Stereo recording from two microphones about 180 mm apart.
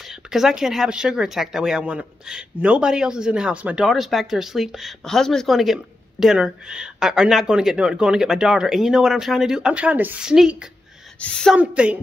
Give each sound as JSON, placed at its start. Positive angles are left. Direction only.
{"t": 0.0, "sound": "speech", "side_deg": 0}
{"t": 11.5, "sound": "speech", "side_deg": -5}